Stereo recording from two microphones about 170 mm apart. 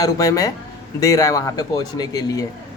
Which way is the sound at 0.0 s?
20° left (ahead or behind).